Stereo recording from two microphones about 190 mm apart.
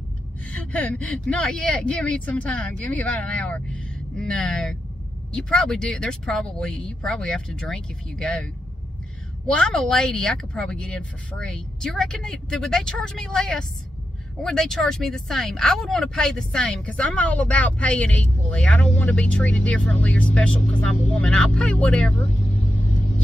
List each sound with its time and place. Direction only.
0.5 s speech: 5° left (ahead or behind)
9.5 s speech: 5° left (ahead or behind)